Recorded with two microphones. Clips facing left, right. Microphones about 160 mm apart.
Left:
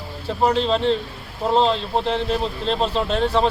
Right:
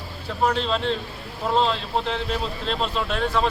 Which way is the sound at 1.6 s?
20° left (ahead or behind).